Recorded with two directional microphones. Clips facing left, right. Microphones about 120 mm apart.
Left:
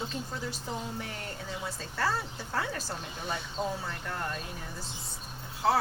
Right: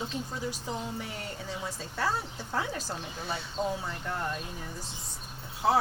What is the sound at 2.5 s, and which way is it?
Speech, 15° right (ahead or behind).